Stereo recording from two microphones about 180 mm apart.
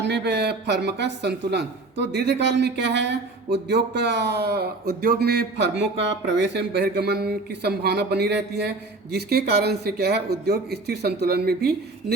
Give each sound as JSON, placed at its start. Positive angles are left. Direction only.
{"t": 0.0, "sound": "speech", "side_deg": -70}